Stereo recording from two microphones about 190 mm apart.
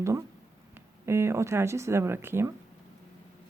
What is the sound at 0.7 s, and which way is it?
Speech, 15° right (ahead or behind).